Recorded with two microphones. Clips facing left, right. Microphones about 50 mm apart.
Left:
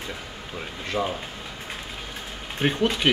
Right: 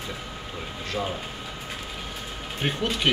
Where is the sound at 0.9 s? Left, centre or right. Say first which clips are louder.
Left 3 dB; left.